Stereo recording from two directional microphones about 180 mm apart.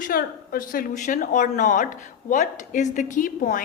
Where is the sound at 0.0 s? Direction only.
55° left (ahead or behind).